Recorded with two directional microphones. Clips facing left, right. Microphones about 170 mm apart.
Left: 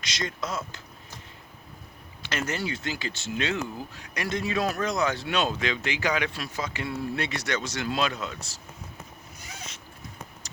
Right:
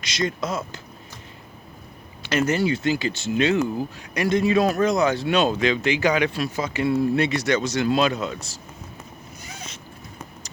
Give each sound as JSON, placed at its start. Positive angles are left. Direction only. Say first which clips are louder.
{"t": 0.2, "sound": "speech", "louder": "right 7 dB", "side_deg": -15}
{"t": 2.2, "sound": "speech", "louder": "right 9 dB", "side_deg": -10}